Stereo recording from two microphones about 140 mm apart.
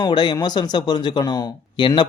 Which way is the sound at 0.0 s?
30° left (ahead or behind).